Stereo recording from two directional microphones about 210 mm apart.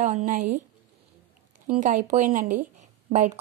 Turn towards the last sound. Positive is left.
turn(degrees=-35)  # may be behind; listen again after turning